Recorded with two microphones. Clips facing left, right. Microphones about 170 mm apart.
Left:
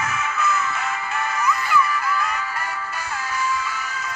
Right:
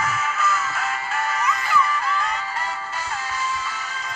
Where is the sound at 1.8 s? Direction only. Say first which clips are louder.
Left 1 dB; 30° right (ahead or behind).